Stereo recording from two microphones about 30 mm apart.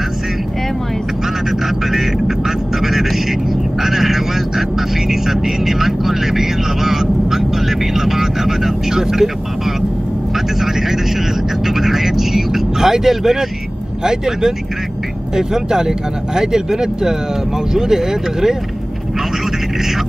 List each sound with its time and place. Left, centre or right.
1.9 s music: centre
3.8 s speech: centre
11.6 s vehicle: centre
14.0 s speech: centre